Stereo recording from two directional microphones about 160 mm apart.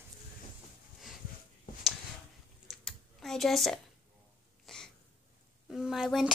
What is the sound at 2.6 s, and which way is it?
Typing, centre (ahead or behind).